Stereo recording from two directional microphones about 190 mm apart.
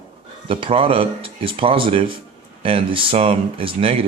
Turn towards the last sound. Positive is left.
turn(degrees=-30)  # may be behind; listen again after turning